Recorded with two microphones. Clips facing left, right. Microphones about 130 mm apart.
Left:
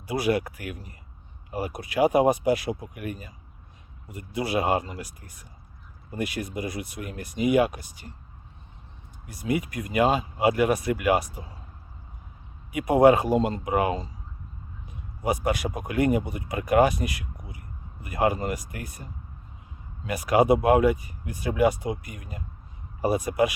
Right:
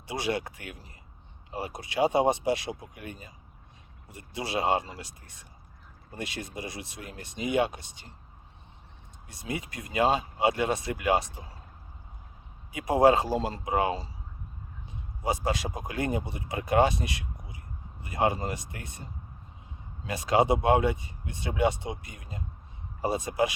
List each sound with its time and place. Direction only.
0.1 s speech: 25° right (ahead or behind)
4.4 s speech: 25° right (ahead or behind)
9.2 s speech: 25° right (ahead or behind)
13.0 s speech: 30° right (ahead or behind)